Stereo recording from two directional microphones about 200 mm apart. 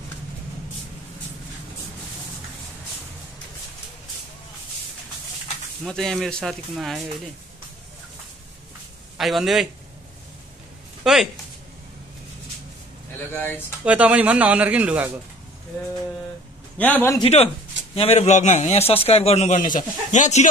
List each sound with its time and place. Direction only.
5.9 s speech: centre (ahead or behind)
9.2 s speech: centre (ahead or behind)
11.1 s speech: centre (ahead or behind)
13.3 s a man's voice: 10° left (ahead or behind)
13.8 s a man's voice: 5° right (ahead or behind)
16.7 s a man's voice: 10° left (ahead or behind)
17.2 s speech: 30° left (ahead or behind)